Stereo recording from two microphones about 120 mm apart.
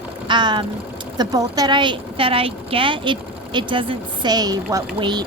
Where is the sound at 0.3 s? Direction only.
40° right (ahead or behind).